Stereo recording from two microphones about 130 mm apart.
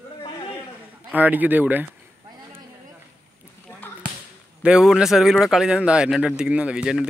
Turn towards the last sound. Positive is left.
turn(degrees=-5)  # may be behind; listen again after turning